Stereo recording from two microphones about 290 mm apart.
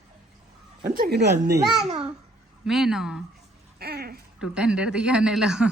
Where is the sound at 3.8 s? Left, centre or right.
Right.